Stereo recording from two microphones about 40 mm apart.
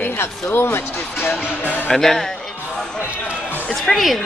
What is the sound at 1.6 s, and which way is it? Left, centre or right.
Speech, left.